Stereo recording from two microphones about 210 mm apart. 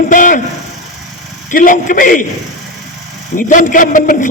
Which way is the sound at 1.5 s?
40° left (ahead or behind).